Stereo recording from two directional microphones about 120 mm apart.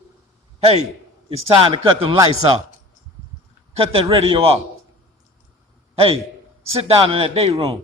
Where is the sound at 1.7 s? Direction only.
50° right (ahead or behind).